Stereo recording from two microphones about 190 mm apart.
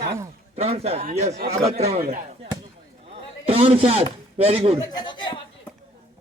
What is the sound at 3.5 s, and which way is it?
A man's voice, 30° right (ahead or behind).